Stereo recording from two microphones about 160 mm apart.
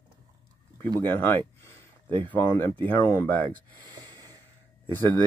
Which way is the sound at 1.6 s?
15° left (ahead or behind).